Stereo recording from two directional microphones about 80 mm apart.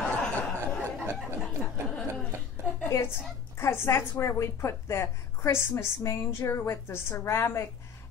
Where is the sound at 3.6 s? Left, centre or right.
Left.